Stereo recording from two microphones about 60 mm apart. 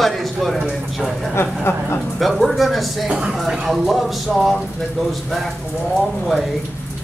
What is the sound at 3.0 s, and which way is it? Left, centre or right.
Speech, centre.